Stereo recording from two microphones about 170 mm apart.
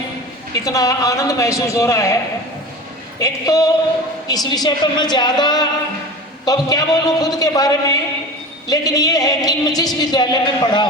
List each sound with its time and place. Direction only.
0.5 s a man's voice: 20° left (ahead or behind)
3.2 s a man's voice: 20° left (ahead or behind)